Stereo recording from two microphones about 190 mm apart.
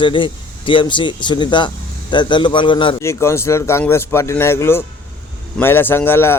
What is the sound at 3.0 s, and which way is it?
Speech, 15° left (ahead or behind).